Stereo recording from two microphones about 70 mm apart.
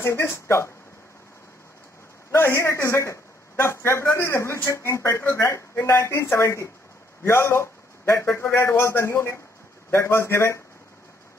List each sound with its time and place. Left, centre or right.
0.0 s a man's voice: left
2.3 s a man's voice: left